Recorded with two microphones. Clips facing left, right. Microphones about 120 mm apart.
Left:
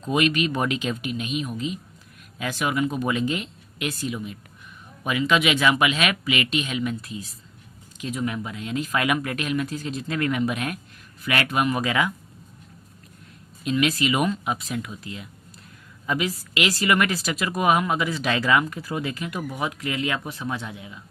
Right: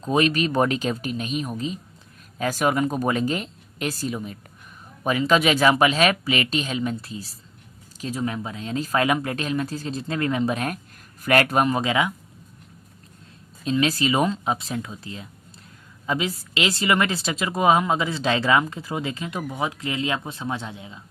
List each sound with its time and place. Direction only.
0.0 s speech: 35° right (ahead or behind)
13.7 s speech: 30° right (ahead or behind)